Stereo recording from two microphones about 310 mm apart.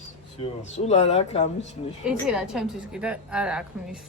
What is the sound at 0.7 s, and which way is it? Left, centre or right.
Speech, left.